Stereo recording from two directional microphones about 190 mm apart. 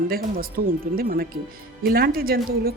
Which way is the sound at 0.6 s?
50° right (ahead or behind).